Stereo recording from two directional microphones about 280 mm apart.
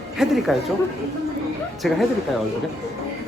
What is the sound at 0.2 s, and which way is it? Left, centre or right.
Speech, centre.